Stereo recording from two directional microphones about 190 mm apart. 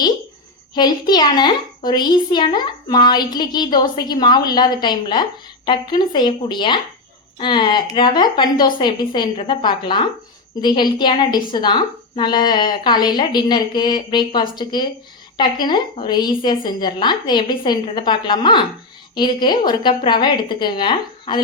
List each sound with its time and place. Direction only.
0.7 s a woman's voice: 20° left (ahead or behind)